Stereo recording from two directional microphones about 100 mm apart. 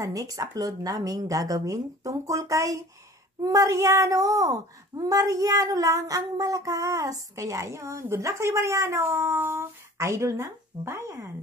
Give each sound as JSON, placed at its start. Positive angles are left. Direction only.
{"t": 0.0, "sound": "speech", "side_deg": -35}